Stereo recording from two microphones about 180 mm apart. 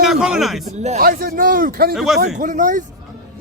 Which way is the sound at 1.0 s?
55° right (ahead or behind).